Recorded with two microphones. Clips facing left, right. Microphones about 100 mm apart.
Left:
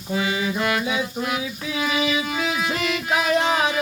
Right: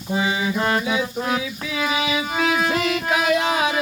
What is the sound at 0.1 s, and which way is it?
Music, 25° right (ahead or behind).